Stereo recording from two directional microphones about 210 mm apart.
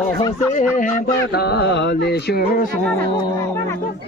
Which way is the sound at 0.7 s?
45° left (ahead or behind).